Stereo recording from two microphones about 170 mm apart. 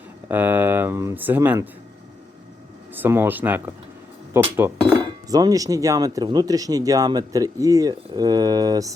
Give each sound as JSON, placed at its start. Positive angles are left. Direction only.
{"t": 0.3, "sound": "speech", "side_deg": -10}
{"t": 2.9, "sound": "speech", "side_deg": -15}
{"t": 4.8, "sound": "speech", "side_deg": -25}